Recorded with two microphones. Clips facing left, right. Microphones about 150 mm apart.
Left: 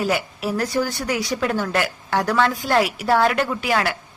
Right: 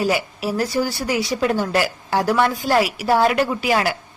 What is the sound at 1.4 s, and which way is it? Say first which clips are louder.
A woman's voice: right 4 dB; 20° right (ahead or behind).